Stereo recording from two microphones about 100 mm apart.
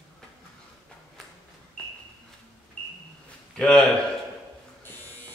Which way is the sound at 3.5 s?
5° left (ahead or behind).